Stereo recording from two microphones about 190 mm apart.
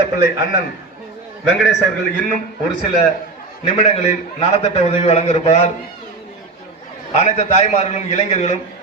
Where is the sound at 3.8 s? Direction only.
30° left (ahead or behind).